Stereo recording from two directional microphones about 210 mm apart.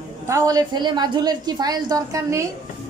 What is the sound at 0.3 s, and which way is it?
A woman's voice, 15° right (ahead or behind).